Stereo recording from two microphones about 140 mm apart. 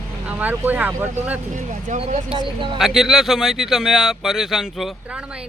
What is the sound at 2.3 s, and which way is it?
Speech, 35° right (ahead or behind).